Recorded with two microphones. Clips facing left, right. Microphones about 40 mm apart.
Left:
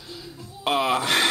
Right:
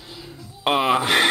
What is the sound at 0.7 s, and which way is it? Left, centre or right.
Speech, right.